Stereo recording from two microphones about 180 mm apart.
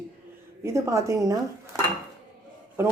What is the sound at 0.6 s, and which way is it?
Speech, 15° right (ahead or behind).